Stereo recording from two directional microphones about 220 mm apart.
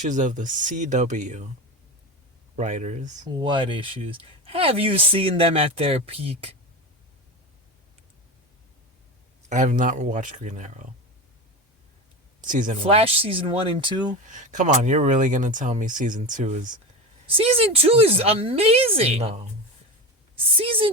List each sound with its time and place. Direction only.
0.0 s speech: 35° right (ahead or behind)
2.6 s speech: 35° right (ahead or behind)
3.2 s speech: 20° right (ahead or behind)
9.5 s speech: 35° right (ahead or behind)
12.4 s speech: 35° right (ahead or behind)
12.8 s speech: 25° right (ahead or behind)
14.3 s a woman's voice: 35° right (ahead or behind)